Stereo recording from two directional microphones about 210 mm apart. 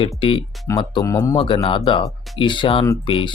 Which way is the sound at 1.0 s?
15° left (ahead or behind).